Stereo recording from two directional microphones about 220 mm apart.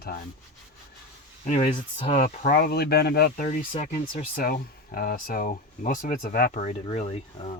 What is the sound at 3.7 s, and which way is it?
Speech, 30° left (ahead or behind).